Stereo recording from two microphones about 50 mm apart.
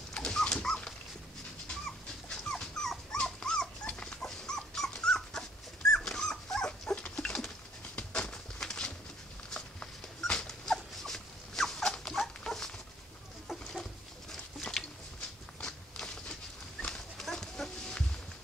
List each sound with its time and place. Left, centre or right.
0.1 s dog: centre
2.2 s dog: centre
7.0 s a sound: left
9.5 s dog: left
10.4 s dog: centre
14.3 s a sound: centre
15.6 s walk: centre
16.9 s horse: centre